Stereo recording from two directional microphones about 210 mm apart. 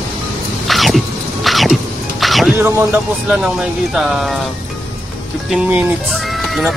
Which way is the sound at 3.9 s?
Centre (ahead or behind).